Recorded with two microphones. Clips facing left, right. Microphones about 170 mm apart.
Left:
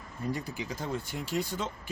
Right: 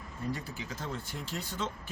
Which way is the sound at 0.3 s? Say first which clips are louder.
Left 4 dB; 15° left (ahead or behind).